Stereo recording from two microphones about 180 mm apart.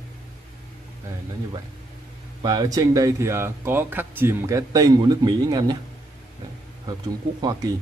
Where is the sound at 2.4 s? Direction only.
20° right (ahead or behind).